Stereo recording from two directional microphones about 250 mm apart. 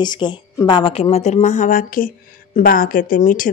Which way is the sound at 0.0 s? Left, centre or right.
Centre.